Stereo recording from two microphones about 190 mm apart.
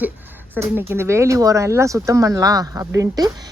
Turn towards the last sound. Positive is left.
turn(degrees=-15)  # may be behind; listen again after turning